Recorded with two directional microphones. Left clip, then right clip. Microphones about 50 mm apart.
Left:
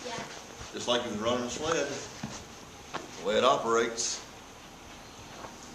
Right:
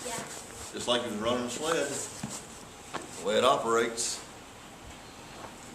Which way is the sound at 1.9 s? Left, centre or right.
Right.